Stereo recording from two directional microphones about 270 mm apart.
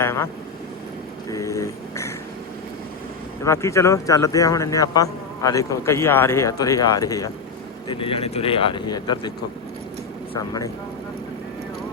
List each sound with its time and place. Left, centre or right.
0.0 s vehicle: centre
1.3 s speech: centre
3.4 s speech: centre
10.3 s speech: centre